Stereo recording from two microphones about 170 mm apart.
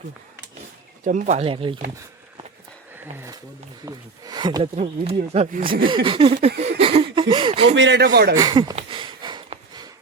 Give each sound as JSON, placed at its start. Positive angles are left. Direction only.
{"t": 1.0, "sound": "speech", "side_deg": -50}
{"t": 2.9, "sound": "speech", "side_deg": -15}
{"t": 4.7, "sound": "speech", "side_deg": -40}
{"t": 5.5, "sound": "speech", "side_deg": -55}
{"t": 5.8, "sound": "speech", "side_deg": -30}
{"t": 7.8, "sound": "speech", "side_deg": -85}
{"t": 8.4, "sound": "speech", "side_deg": -25}
{"t": 8.7, "sound": "a sound", "side_deg": -30}